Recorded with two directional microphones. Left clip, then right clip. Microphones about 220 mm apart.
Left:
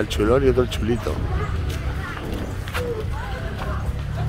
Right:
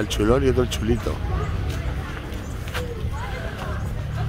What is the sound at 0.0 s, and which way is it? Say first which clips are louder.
Speech: left 2 dB; 5° right (ahead or behind).